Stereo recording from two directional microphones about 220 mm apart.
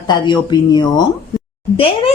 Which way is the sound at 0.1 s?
20° left (ahead or behind).